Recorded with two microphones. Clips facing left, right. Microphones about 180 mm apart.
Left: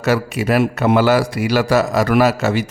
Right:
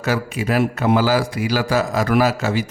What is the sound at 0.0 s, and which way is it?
A man's voice, 70° left (ahead or behind).